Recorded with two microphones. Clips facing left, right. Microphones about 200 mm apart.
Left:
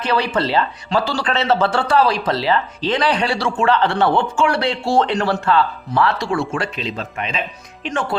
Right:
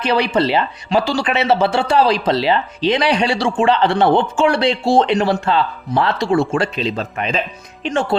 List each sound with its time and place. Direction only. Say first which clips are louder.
0.0 s speech: right 3 dB; 15° right (ahead or behind); by 7.3 s 35° right (ahead or behind)